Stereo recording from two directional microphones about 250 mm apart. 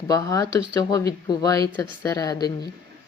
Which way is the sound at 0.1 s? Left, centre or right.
Centre.